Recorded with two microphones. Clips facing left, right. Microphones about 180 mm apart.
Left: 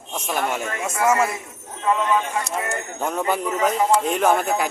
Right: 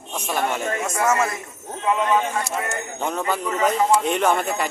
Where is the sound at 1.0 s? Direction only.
10° left (ahead or behind).